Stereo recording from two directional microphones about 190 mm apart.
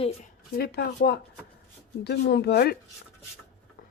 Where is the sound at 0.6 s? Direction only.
55° left (ahead or behind).